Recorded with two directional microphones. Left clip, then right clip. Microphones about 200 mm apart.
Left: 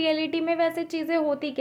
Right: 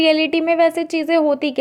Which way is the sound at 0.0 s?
35° right (ahead or behind).